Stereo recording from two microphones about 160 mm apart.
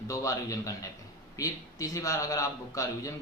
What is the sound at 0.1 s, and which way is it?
A man's voice, 20° left (ahead or behind).